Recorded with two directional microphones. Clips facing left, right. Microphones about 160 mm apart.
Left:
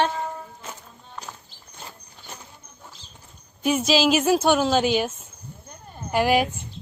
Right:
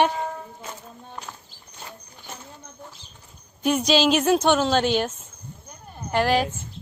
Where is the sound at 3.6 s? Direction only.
5° left (ahead or behind).